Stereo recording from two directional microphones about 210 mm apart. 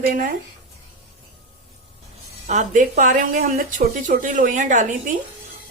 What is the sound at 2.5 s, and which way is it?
A woman's voice, 35° right (ahead or behind).